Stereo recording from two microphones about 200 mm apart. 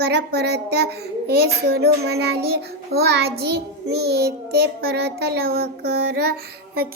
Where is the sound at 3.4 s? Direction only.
55° right (ahead or behind).